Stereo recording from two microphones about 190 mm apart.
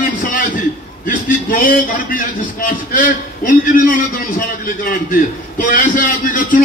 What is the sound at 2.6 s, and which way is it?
A man's voice, 45° left (ahead or behind).